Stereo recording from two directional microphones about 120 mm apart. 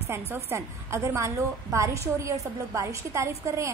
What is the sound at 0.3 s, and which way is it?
A woman's voice, 20° right (ahead or behind).